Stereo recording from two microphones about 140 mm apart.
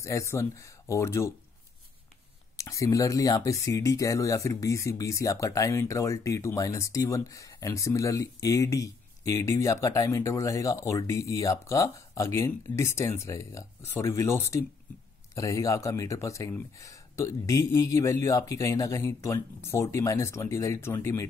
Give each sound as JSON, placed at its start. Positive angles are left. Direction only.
{"t": 0.0, "sound": "speech", "side_deg": 20}
{"t": 2.5, "sound": "speech", "side_deg": 20}